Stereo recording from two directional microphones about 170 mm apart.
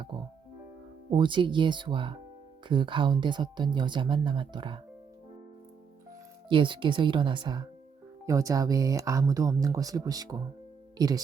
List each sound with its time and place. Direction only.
1.1 s speech: 30° right (ahead or behind)
6.5 s speech: 30° right (ahead or behind)